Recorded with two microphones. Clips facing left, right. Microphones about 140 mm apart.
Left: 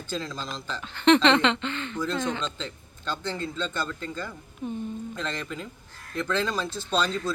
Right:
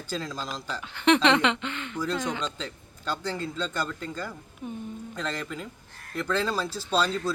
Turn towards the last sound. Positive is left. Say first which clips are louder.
# right 1 dB
turn(degrees=-5)  # may be behind; listen again after turning